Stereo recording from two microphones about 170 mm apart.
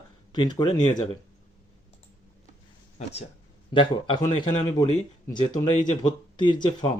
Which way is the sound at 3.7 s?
30° left (ahead or behind).